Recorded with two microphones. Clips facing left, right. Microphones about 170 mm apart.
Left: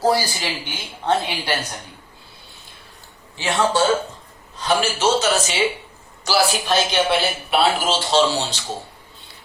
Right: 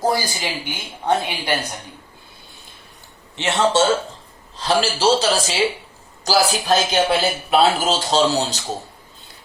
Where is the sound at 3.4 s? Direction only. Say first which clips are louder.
Right 1 dB; 25° right (ahead or behind).